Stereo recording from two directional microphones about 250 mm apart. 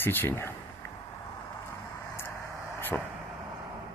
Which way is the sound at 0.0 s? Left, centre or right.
Centre.